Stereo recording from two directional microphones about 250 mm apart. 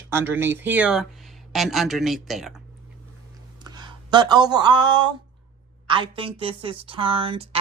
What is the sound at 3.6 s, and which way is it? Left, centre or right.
A woman's voice, centre.